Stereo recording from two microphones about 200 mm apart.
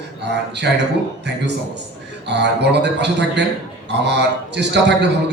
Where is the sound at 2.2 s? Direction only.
60° right (ahead or behind).